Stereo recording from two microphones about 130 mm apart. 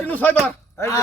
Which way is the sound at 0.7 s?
20° left (ahead or behind).